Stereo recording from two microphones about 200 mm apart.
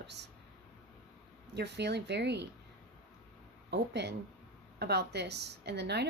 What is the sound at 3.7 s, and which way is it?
A woman's voice, 60° right (ahead or behind).